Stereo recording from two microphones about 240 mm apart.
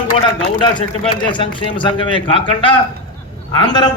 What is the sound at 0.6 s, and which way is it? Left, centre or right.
A man's voice, left.